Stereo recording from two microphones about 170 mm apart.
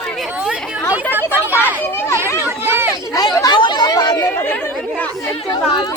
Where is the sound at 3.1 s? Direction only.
20° left (ahead or behind).